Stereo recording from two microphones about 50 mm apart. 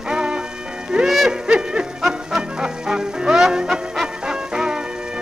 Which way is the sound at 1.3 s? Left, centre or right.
Centre.